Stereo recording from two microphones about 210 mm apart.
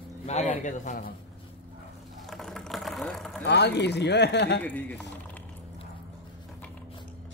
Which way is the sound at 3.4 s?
55° left (ahead or behind).